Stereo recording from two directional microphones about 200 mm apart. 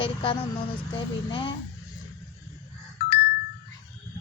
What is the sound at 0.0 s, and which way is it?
A woman's voice, 25° left (ahead or behind).